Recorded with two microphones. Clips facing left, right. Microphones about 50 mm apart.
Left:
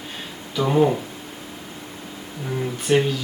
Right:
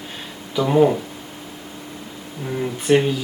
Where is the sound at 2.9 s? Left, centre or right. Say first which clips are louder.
Right 3 dB; centre.